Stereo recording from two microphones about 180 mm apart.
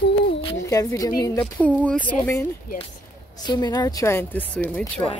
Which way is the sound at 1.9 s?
10° left (ahead or behind).